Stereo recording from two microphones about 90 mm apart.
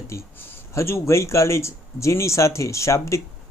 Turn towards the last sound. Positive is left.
turn(degrees=35)  # may be behind; listen again after turning